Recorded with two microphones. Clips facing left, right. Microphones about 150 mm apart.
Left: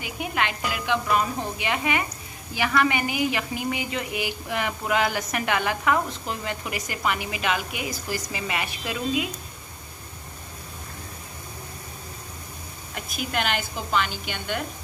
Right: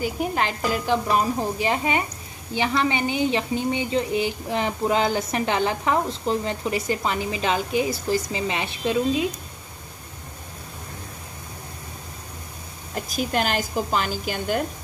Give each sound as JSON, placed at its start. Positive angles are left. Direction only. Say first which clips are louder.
{"t": 0.0, "sound": "a woman's voice", "louder": "right 4 dB", "side_deg": -35}
{"t": 12.9, "sound": "a woman's voice", "louder": "right 5 dB", "side_deg": -35}